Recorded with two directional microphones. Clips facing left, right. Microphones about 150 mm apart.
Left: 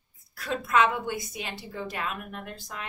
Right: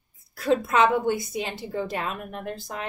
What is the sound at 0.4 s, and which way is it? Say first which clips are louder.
A woman's voice: right 4 dB; 30° right (ahead or behind).